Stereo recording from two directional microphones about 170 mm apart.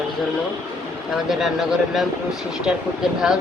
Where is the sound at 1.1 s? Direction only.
Centre (ahead or behind).